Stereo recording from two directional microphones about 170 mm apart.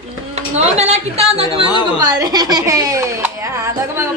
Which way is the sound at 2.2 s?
25° right (ahead or behind).